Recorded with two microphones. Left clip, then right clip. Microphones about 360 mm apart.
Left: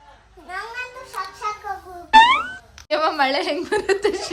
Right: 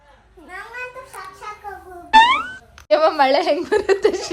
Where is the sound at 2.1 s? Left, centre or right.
Centre.